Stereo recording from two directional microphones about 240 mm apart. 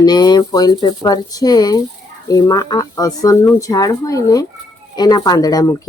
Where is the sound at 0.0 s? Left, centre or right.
Centre.